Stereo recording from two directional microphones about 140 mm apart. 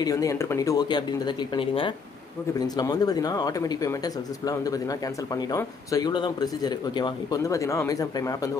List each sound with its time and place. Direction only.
0.0 s speech: 25° left (ahead or behind)
5.3 s speech: 25° left (ahead or behind)